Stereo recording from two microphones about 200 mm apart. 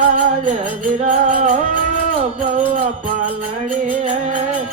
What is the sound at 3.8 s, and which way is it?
Music, 40° right (ahead or behind).